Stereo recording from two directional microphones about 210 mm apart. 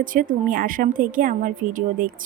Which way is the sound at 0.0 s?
40° right (ahead or behind).